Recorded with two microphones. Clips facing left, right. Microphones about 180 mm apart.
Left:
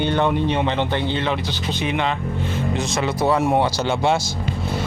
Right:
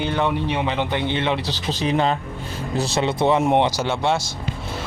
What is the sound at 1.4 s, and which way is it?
Speech, 40° right (ahead or behind).